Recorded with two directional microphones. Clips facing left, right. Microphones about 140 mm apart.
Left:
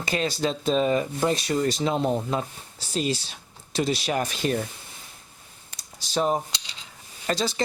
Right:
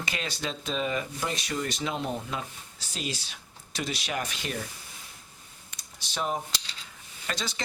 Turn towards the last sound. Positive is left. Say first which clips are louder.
# left 9 dB
turn(degrees=35)  # may be behind; listen again after turning